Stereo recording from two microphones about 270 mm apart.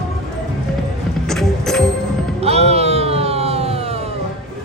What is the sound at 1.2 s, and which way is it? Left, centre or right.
Music, centre.